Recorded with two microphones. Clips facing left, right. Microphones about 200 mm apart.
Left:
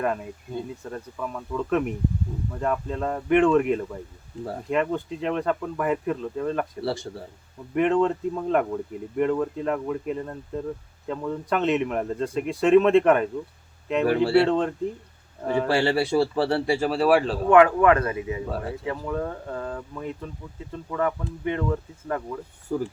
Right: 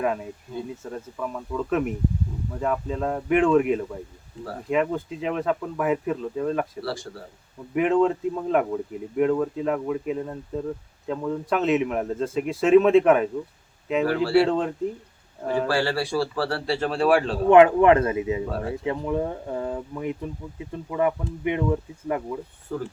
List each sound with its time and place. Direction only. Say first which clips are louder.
0.9 s a man's voice: right 1 dB; centre (ahead or behind)
6.8 s a man's voice: left 3 dB; 25° left (ahead or behind)
7.7 s a man's voice: right 1 dB; 5° right (ahead or behind)
15.6 s a man's voice: left 4 dB; 20° left (ahead or behind)
16.7 s a man's voice: right 1 dB; 5° left (ahead or behind)
17.5 s speech: right 2 dB; 25° right (ahead or behind)
18.4 s a man's voice: right 1 dB; centre (ahead or behind)
18.9 s speech: right 3 dB; 20° right (ahead or behind)
22.7 s speech: left 3 dB; 15° left (ahead or behind)